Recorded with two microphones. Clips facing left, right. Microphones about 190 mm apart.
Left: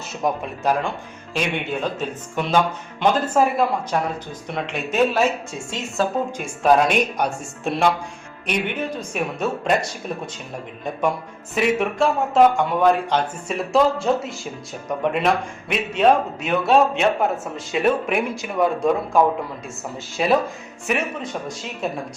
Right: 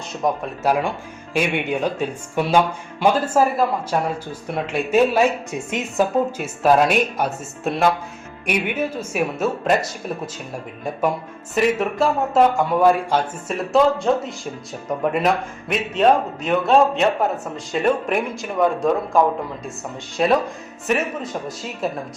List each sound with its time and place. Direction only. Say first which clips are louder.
0.2 s speech: right 1 dB; centre (ahead or behind)
0.6 s speech: right 2 dB; 10° right (ahead or behind)
6.3 s speech: even; 5° right (ahead or behind)
11.5 s speech: right 1 dB; centre (ahead or behind)